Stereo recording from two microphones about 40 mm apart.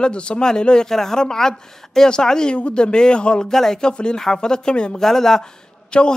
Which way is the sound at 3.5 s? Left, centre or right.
Centre.